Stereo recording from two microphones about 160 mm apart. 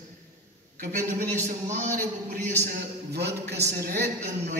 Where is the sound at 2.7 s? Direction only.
90° right.